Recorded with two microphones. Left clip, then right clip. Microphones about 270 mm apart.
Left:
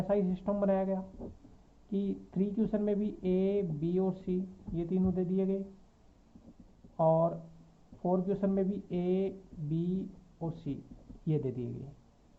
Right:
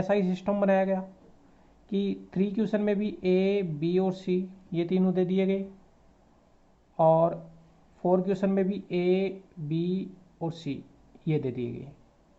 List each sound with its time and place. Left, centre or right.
0.1 s speech: right
6.9 s speech: right